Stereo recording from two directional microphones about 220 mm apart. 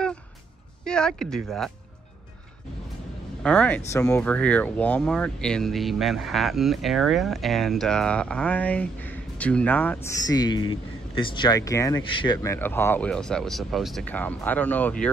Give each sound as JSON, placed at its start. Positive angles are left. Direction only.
{"t": 0.8, "sound": "speech", "side_deg": 5}
{"t": 3.4, "sound": "speech", "side_deg": 5}
{"t": 12.5, "sound": "speech", "side_deg": 10}